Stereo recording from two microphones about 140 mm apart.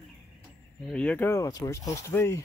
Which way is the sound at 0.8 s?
10° left (ahead or behind).